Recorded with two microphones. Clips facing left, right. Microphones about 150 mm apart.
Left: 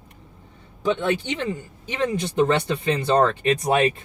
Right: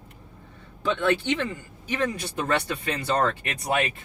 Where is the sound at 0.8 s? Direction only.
15° left (ahead or behind); by 3.9 s 30° left (ahead or behind).